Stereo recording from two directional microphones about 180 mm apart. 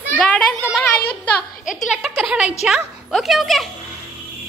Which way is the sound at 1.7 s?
5° right (ahead or behind).